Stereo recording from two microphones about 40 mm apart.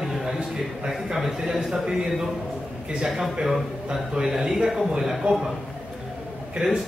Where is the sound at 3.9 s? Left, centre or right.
Centre.